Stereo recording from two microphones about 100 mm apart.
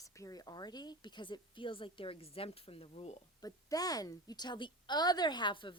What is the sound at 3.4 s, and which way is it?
A woman's voice, 40° left (ahead or behind).